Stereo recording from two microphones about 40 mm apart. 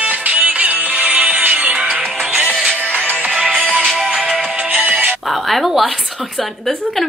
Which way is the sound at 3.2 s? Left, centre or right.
Right.